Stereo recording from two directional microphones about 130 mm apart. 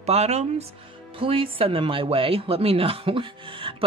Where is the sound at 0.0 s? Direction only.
55° right (ahead or behind).